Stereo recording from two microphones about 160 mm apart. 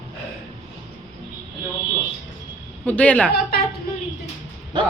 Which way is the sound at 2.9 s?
10° left (ahead or behind).